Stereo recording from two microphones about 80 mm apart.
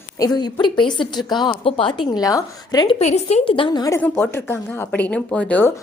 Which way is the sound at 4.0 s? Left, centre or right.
Left.